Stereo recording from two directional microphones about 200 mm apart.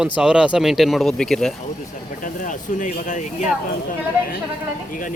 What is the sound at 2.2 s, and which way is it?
Speech, 40° left (ahead or behind).